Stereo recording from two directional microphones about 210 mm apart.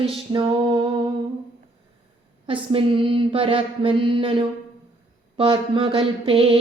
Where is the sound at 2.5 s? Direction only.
25° right (ahead or behind).